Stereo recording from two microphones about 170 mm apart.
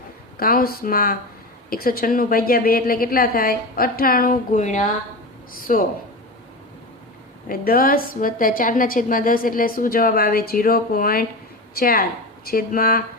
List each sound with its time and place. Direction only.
0.3 s a woman's voice: 60° left (ahead or behind)
7.4 s a woman's voice: 60° left (ahead or behind)